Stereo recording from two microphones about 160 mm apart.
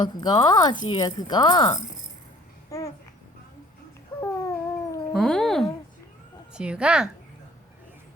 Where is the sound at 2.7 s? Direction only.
20° left (ahead or behind).